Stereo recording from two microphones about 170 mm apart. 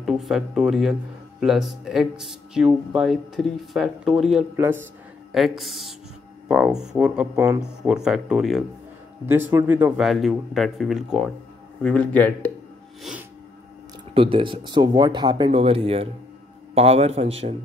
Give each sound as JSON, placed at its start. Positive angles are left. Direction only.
{"t": 0.0, "sound": "speech", "side_deg": 0}
{"t": 4.6, "sound": "speech", "side_deg": -15}
{"t": 5.3, "sound": "speech", "side_deg": 0}
{"t": 9.2, "sound": "speech", "side_deg": -10}
{"t": 14.1, "sound": "a man's voice", "side_deg": -30}